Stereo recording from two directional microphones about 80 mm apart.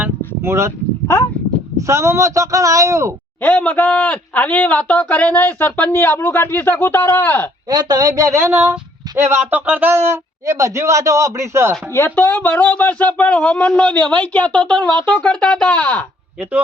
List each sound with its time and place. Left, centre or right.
0.4 s a man's voice: right
1.9 s a man's voice: right
3.4 s a man's voice: centre
7.7 s speech: right
8.4 s a man's voice: right
9.5 s a man's voice: right
11.9 s a man's voice: left; by 14.9 s centre
14.9 s a man's voice: left